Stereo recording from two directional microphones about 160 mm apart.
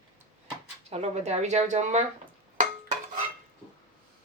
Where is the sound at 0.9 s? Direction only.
45° right (ahead or behind).